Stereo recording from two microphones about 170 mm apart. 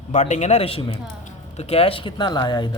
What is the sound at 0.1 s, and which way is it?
Speech, 45° left (ahead or behind).